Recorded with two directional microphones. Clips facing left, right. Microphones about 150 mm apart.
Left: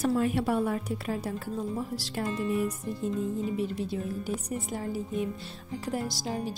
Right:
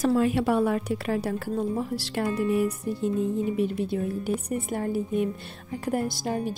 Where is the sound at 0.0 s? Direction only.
90° right.